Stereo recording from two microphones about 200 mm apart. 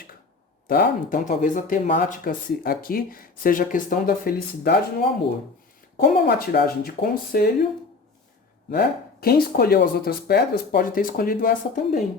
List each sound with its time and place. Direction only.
0.7 s speech: 45° left (ahead or behind)
9.2 s speech: 50° left (ahead or behind)